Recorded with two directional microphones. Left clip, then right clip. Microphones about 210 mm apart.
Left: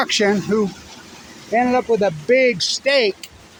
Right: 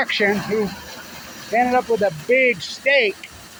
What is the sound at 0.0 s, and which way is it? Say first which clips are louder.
Speech: left 1 dB; 35° left (ahead or behind).